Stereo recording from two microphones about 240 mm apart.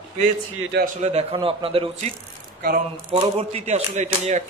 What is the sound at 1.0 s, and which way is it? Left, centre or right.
Speech, right.